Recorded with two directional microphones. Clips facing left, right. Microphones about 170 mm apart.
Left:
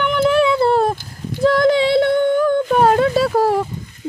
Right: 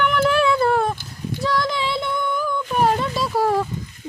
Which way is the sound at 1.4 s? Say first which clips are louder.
Left 10 dB; 50° left (ahead or behind).